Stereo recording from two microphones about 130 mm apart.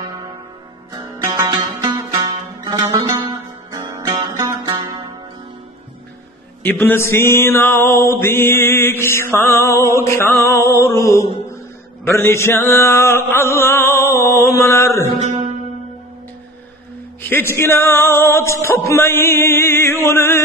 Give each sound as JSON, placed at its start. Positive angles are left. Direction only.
{"t": 0.0, "sound": "music", "side_deg": -35}
{"t": 1.2, "sound": "music", "side_deg": -20}
{"t": 1.5, "sound": "zither", "side_deg": -30}
{"t": 2.6, "sound": "music", "side_deg": -25}
{"t": 3.9, "sound": "guitar", "side_deg": -25}
{"t": 6.6, "sound": "music", "side_deg": 15}
{"t": 11.5, "sound": "mantra", "side_deg": 20}
{"t": 17.2, "sound": "music", "side_deg": 15}